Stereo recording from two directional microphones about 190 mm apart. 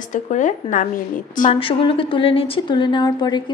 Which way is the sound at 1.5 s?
30° left (ahead or behind).